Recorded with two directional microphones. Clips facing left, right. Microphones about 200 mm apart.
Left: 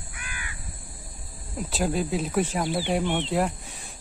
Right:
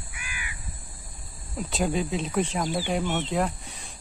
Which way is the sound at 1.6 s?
Centre (ahead or behind).